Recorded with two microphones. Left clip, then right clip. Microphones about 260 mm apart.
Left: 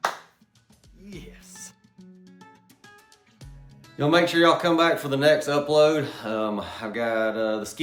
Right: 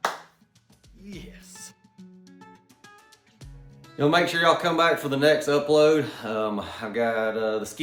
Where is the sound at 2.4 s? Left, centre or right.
Centre.